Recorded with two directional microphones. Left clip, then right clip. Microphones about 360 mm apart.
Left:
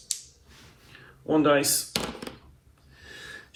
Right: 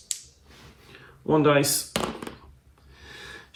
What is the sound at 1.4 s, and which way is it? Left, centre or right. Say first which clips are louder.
Speech: right 1 dB; centre.